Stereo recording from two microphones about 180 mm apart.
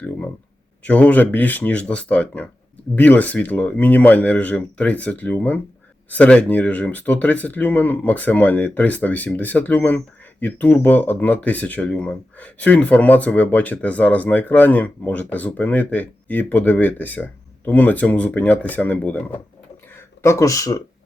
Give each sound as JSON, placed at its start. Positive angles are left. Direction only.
{"t": 0.9, "sound": "speech", "side_deg": 10}